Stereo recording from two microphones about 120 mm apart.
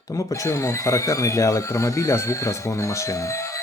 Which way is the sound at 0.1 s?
25° left (ahead or behind).